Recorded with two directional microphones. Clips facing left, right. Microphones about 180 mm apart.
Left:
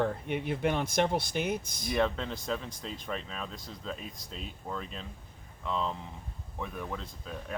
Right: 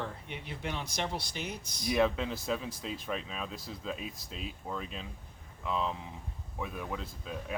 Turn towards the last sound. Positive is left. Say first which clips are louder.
# right 1 dB
turn(degrees=-5)  # may be behind; listen again after turning